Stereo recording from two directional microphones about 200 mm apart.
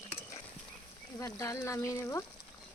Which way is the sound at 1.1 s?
15° left (ahead or behind).